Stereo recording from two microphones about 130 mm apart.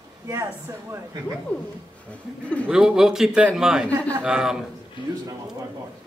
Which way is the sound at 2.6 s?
5° right (ahead or behind).